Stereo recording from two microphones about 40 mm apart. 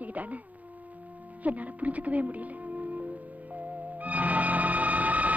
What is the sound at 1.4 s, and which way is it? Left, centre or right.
Speech, right.